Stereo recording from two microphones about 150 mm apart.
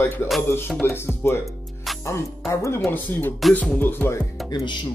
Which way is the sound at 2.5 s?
20° left (ahead or behind).